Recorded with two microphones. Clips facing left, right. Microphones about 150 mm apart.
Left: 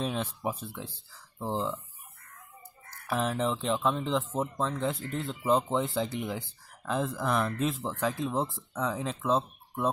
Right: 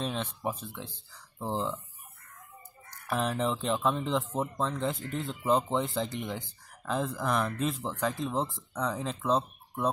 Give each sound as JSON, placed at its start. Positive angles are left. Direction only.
{"t": 0.0, "sound": "speech", "side_deg": 5}
{"t": 3.1, "sound": "speech", "side_deg": 0}